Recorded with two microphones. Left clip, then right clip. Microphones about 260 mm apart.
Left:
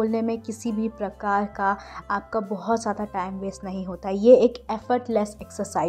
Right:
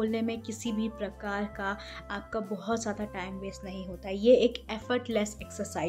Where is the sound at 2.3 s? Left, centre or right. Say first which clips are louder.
Left 5 dB; centre.